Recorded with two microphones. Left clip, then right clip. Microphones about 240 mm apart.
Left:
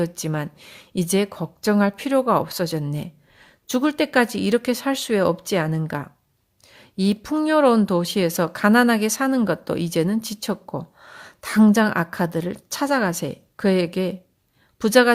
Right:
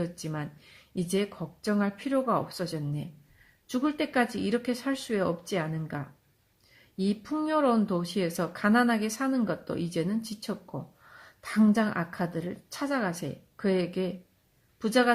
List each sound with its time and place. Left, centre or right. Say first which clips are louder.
0.0 s speech: left 9 dB; left